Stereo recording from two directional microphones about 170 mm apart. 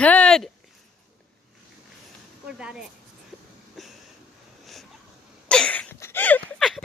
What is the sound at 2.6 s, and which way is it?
Speech, 5° right (ahead or behind).